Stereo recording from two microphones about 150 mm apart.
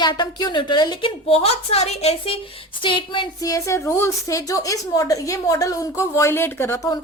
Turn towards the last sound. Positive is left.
turn(degrees=25)  # may be behind; listen again after turning